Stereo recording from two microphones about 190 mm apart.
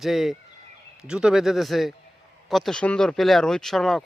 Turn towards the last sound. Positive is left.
turn(degrees=0)  # may be behind; listen again after turning